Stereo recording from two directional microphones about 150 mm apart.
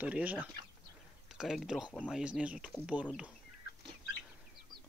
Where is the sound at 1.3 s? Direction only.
Centre (ahead or behind).